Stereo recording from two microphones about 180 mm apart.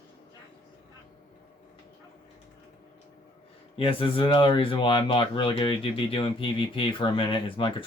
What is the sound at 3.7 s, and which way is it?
Speech, 30° left (ahead or behind).